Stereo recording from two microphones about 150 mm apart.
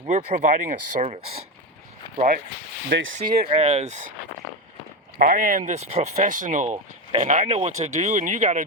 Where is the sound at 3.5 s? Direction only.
45° right (ahead or behind).